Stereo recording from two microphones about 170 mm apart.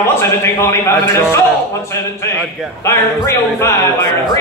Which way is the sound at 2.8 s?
15° left (ahead or behind).